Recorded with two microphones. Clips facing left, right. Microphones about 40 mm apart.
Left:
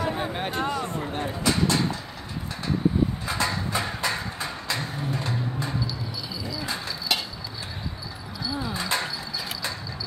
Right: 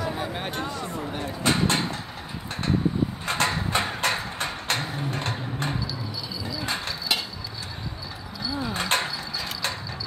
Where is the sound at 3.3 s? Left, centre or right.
Right.